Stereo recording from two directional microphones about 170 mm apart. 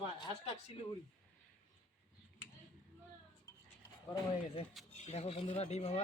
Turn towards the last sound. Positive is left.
turn(degrees=40)  # may be behind; listen again after turning